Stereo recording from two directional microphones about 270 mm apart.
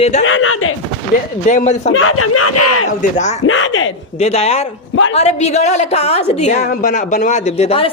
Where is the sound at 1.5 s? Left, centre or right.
Left.